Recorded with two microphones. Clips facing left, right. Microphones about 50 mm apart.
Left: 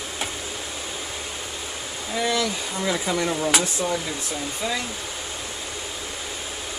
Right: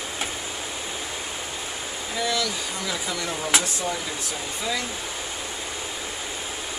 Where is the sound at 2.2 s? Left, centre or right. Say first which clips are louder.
Left 2 dB; left.